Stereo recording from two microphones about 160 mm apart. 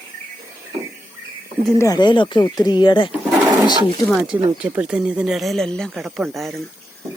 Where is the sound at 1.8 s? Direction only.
25° left (ahead or behind).